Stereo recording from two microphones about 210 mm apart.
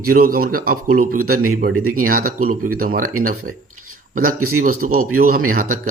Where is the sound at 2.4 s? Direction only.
40° right (ahead or behind).